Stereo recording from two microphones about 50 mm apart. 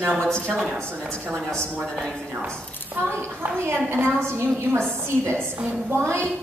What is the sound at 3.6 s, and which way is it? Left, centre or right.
A woman's voice, right.